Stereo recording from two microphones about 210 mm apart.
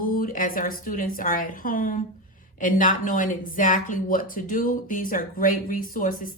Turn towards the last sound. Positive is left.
turn(degrees=40)  # may be behind; listen again after turning